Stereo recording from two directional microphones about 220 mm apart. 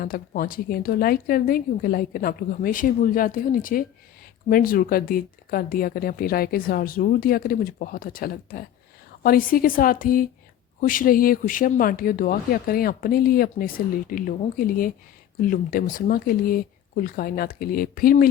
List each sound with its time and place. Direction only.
0.0 s speech: 40° left (ahead or behind)